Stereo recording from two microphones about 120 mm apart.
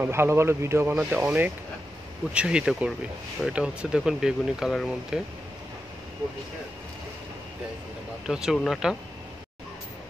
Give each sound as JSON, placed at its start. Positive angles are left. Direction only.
{"t": 0.0, "sound": "speech", "side_deg": -20}
{"t": 8.3, "sound": "speech", "side_deg": -5}